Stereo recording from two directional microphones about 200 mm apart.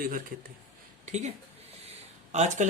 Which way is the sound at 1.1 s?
35° right (ahead or behind).